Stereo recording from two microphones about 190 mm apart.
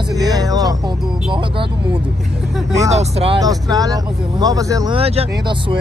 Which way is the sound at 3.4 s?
20° right (ahead or behind).